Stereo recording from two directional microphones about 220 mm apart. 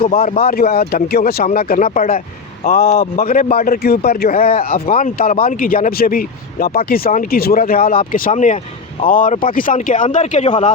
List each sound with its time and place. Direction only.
0.0 s speech: 30° left (ahead or behind)
0.4 s a man's voice: 40° left (ahead or behind)